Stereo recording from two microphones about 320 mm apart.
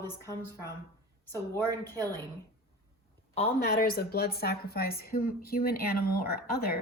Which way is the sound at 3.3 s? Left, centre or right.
Left.